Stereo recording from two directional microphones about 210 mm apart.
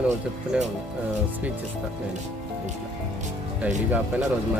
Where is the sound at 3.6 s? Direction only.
5° right (ahead or behind).